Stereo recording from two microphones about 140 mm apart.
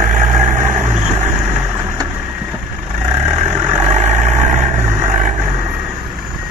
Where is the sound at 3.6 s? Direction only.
55° right (ahead or behind).